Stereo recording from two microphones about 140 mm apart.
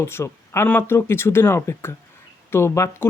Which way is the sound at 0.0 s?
15° left (ahead or behind).